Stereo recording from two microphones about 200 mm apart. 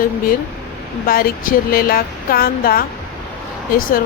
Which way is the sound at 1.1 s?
45° left (ahead or behind).